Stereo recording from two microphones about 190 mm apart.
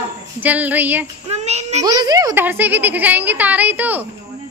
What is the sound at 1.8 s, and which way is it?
A woman's voice, 20° right (ahead or behind).